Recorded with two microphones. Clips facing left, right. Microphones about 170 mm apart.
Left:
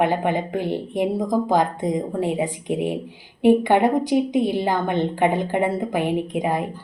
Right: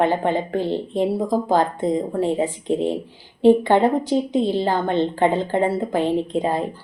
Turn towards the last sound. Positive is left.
turn(degrees=15)  # may be behind; listen again after turning